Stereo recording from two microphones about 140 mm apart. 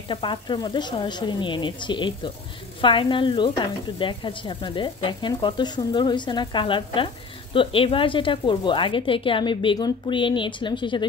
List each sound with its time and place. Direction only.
0.1 s speech: 35° left (ahead or behind)